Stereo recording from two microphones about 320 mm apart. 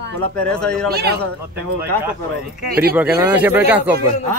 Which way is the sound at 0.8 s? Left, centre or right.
Right.